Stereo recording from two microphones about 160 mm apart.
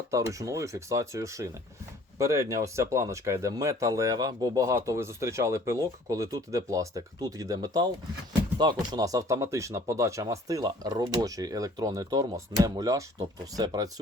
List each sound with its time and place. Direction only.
0.1 s speech: 20° right (ahead or behind)
8.9 s speech: 20° right (ahead or behind)